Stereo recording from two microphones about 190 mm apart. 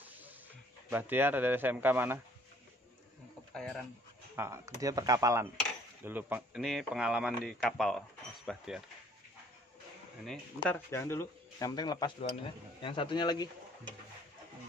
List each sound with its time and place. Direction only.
0.0 s snake: 10° right (ahead or behind)
0.8 s a man's voice: 10° right (ahead or behind)
3.5 s speech: 5° left (ahead or behind)
4.4 s a man's voice: 15° right (ahead or behind)
10.2 s speech: 5° left (ahead or behind); by 13.5 s 25° left (ahead or behind)